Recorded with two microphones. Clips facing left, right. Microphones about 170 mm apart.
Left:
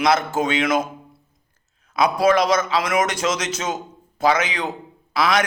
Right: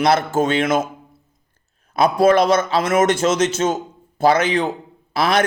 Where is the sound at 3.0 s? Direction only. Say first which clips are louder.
Right 6 dB; 25° right (ahead or behind).